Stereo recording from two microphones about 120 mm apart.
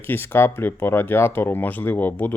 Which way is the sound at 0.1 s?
20° left (ahead or behind).